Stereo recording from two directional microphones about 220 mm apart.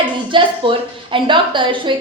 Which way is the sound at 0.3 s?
25° right (ahead or behind).